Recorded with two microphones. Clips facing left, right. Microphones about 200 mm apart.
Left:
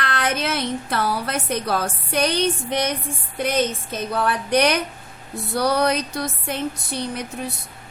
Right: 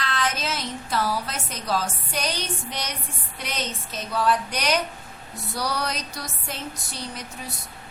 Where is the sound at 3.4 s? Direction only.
55° left (ahead or behind).